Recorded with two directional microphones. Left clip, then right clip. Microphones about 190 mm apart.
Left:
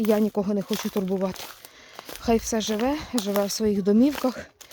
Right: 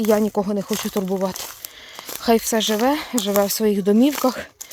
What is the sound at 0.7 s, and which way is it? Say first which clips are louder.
Speech: right 4 dB; 50° right (ahead or behind).